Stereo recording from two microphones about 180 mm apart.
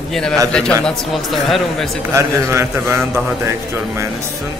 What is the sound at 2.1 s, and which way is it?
A man's voice, 15° right (ahead or behind).